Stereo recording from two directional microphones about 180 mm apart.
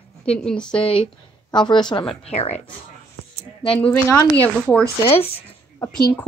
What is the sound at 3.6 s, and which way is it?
Speech, 30° left (ahead or behind).